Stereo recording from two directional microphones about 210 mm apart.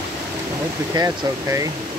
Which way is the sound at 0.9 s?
15° right (ahead or behind).